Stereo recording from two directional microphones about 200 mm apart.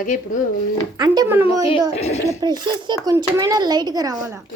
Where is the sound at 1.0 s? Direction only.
15° right (ahead or behind).